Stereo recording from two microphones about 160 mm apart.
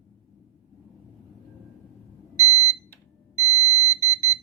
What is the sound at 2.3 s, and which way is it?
Alarm, 20° left (ahead or behind).